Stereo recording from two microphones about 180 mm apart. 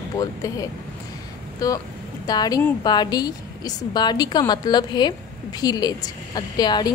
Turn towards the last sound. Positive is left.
turn(degrees=25)  # may be behind; listen again after turning